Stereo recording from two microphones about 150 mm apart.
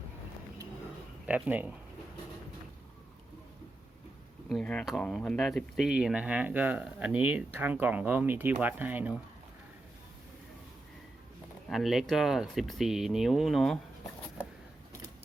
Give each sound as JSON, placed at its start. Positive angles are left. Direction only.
{"t": 1.3, "sound": "speech", "side_deg": -10}
{"t": 4.4, "sound": "speech", "side_deg": 5}
{"t": 11.7, "sound": "speech", "side_deg": 0}